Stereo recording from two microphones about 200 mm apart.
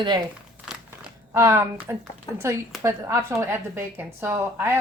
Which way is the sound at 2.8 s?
15° right (ahead or behind).